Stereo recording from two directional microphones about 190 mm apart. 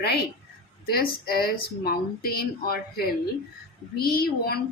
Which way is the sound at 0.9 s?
55° left (ahead or behind).